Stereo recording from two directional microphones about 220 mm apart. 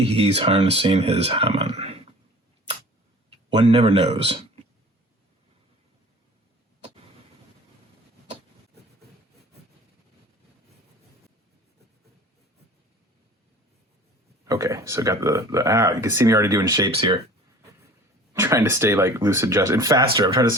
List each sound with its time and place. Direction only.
0.0 s speech: 25° right (ahead or behind)
3.2 s speech: 25° right (ahead or behind)
14.4 s speech: 15° right (ahead or behind)
16.9 s speech: 25° right (ahead or behind)
18.3 s speech: 10° right (ahead or behind)